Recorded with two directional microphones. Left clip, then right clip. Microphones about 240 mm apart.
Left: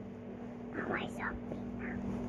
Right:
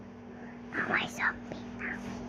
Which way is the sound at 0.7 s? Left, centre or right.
Right.